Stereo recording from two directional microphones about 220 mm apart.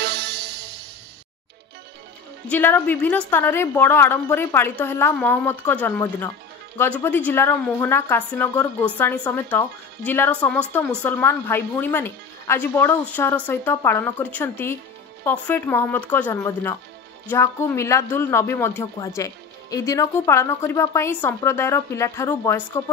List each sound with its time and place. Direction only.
0.0 s music: 50° right (ahead or behind)
2.5 s a woman's voice: 10° left (ahead or behind)